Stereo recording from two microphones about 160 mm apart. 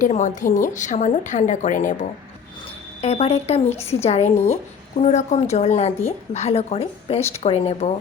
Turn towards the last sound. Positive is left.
turn(degrees=40)  # may be behind; listen again after turning